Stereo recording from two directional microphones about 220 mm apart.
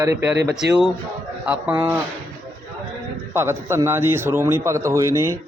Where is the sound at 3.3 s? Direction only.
10° right (ahead or behind).